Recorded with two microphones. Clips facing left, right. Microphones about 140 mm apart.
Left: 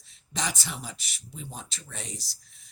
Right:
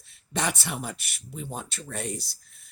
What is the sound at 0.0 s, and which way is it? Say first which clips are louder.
Speech: right 4 dB; 60° right (ahead or behind).